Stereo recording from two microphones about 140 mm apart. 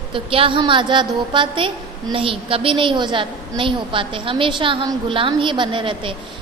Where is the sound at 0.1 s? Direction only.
40° right (ahead or behind).